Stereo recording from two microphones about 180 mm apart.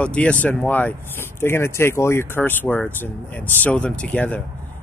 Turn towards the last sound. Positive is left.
turn(degrees=10)  # may be behind; listen again after turning